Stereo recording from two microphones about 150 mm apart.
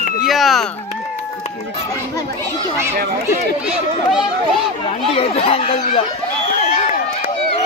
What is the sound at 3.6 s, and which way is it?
Speech, 5° right (ahead or behind).